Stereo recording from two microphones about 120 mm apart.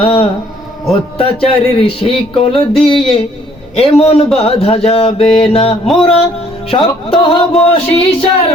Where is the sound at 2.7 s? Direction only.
5° left (ahead or behind).